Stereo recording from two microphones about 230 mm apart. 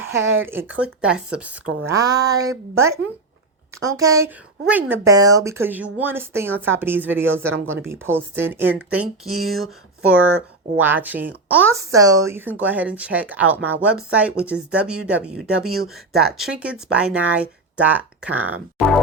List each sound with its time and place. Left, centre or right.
0.8 s speech: centre
1.6 s speech: right
2.0 s a woman's voice: centre
15.7 s speech: right
16.4 s speech: centre